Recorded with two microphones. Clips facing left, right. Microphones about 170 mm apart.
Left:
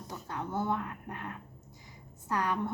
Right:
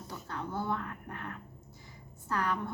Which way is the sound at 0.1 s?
20° left (ahead or behind).